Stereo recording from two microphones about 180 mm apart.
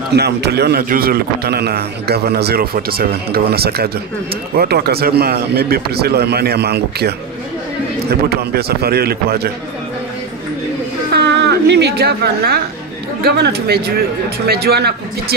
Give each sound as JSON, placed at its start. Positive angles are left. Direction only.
{"t": 0.1, "sound": "a man's voice", "side_deg": -65}
{"t": 11.1, "sound": "a woman's voice", "side_deg": -65}